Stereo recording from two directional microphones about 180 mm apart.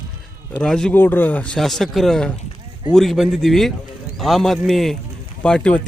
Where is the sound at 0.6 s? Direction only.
5° left (ahead or behind).